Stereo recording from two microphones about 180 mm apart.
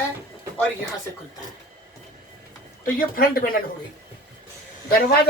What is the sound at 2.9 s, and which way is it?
Speech, 55° left (ahead or behind).